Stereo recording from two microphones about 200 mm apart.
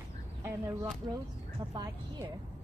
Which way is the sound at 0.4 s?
15° right (ahead or behind).